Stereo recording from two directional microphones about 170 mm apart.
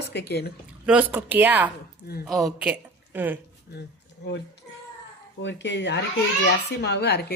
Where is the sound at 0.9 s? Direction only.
10° right (ahead or behind).